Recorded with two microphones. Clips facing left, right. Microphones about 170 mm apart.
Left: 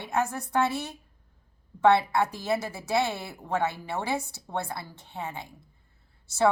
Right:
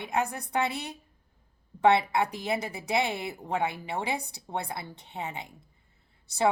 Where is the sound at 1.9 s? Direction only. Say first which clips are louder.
Left 1 dB; 20° right (ahead or behind).